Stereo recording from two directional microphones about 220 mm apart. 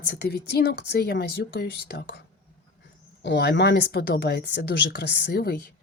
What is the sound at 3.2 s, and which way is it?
A woman's voice, 50° left (ahead or behind).